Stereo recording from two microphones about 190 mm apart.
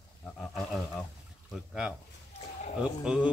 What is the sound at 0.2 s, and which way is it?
Wild animals, 5° left (ahead or behind).